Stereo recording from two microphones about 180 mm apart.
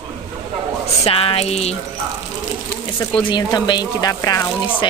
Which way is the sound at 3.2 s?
25° left (ahead or behind).